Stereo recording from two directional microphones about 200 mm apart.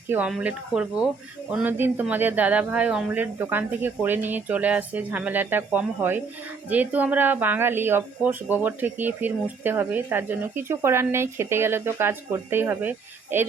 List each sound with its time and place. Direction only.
0.1 s speech: 5° right (ahead or behind)